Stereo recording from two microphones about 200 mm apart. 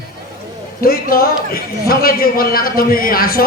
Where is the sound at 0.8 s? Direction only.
50° left (ahead or behind).